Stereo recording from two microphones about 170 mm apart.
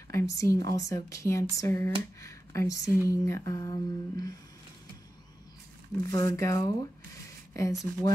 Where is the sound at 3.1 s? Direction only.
20° left (ahead or behind).